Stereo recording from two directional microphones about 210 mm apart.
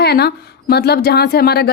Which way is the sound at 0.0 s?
50° left (ahead or behind).